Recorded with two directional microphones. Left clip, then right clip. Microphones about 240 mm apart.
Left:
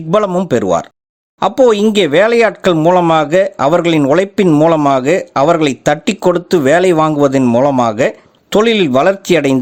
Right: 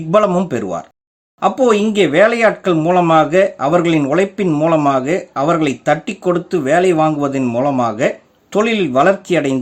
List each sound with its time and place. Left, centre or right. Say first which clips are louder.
0.1 s speech: left 1 dB; left